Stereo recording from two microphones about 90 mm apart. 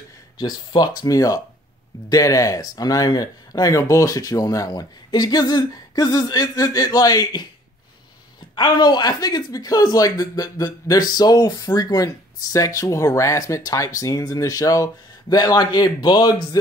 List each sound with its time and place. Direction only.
0.4 s speech: 50° left (ahead or behind)
8.5 s speech: 50° left (ahead or behind)